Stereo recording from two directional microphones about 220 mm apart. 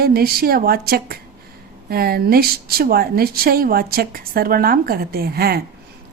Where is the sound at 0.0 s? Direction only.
45° right (ahead or behind).